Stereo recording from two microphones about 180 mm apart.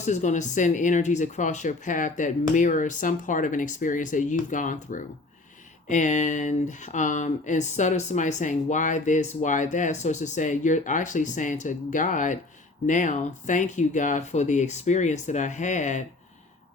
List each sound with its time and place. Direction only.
0.0 s speech: 40° left (ahead or behind)